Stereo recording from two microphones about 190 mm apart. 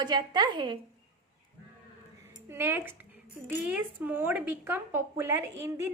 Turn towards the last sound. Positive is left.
turn(degrees=-15)  # may be behind; listen again after turning